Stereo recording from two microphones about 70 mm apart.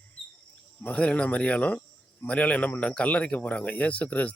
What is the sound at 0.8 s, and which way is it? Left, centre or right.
Speech, centre.